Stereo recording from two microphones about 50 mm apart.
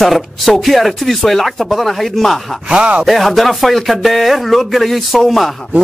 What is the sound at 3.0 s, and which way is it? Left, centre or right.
A man's voice, centre.